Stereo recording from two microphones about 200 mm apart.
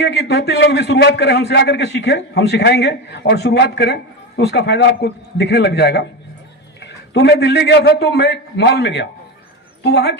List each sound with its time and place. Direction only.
0.0 s a man's voice: 55° left (ahead or behind)